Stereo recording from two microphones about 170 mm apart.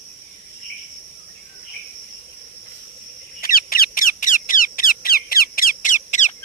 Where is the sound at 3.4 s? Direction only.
55° left (ahead or behind).